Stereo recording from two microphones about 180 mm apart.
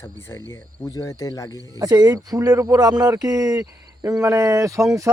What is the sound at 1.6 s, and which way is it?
Speech, 20° right (ahead or behind).